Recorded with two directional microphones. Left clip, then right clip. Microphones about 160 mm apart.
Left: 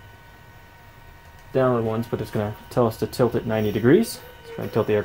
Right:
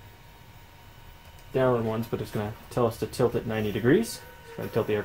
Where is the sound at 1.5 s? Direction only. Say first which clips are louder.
Left 4 dB; 40° left (ahead or behind).